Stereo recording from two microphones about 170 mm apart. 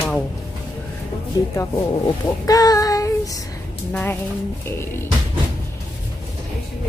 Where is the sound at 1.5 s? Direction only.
20° left (ahead or behind).